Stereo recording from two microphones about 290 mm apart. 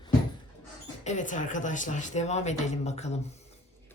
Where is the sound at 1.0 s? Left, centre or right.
Left.